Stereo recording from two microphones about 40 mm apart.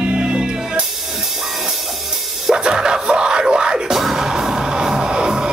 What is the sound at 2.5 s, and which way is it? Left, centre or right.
Music, centre.